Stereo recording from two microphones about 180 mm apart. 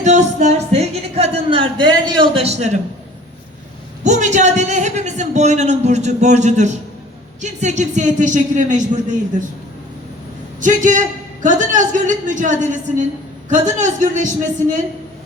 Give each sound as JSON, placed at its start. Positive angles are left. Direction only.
{"t": 0.0, "sound": "a sound", "side_deg": -40}
{"t": 4.0, "sound": "a man's voice", "side_deg": -40}
{"t": 10.6, "sound": "a woman's voice", "side_deg": -45}